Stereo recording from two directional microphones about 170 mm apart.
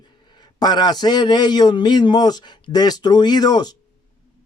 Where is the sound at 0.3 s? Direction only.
25° left (ahead or behind).